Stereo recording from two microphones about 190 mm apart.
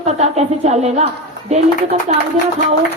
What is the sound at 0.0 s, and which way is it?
A woman's voice, 35° right (ahead or behind).